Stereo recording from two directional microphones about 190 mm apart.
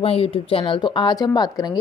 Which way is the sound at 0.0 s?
30° left (ahead or behind).